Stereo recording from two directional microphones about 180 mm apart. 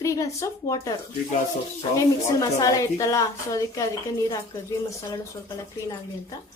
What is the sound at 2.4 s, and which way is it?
A woman's voice, 20° left (ahead or behind).